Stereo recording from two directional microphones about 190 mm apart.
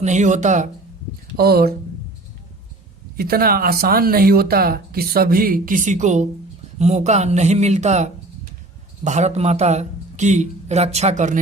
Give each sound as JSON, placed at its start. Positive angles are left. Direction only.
{"t": 0.0, "sound": "speech", "side_deg": -40}
{"t": 1.4, "sound": "speech", "side_deg": -55}
{"t": 3.2, "sound": "speech", "side_deg": -50}